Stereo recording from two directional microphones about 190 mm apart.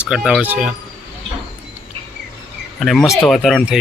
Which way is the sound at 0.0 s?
5° right (ahead or behind).